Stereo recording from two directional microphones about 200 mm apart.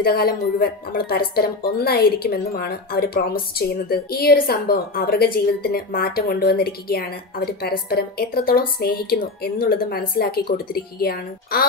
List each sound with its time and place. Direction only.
0.0 s speech: 50° left (ahead or behind)